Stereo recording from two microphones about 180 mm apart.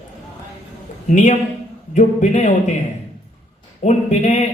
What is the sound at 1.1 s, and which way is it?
Speech, 45° left (ahead or behind).